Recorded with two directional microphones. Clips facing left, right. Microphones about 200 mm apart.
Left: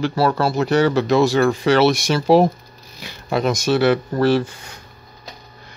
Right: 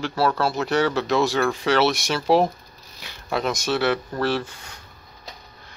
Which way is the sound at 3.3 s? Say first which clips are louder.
Left 5 dB; 5° left (ahead or behind).